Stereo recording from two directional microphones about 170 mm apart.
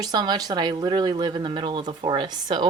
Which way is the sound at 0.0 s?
25° right (ahead or behind).